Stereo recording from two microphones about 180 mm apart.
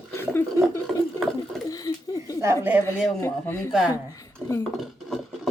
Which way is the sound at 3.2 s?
15° left (ahead or behind).